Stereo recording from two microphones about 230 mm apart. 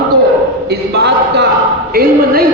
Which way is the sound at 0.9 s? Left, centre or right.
Right.